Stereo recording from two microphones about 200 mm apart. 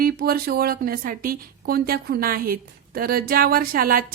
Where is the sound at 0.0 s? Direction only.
50° right (ahead or behind).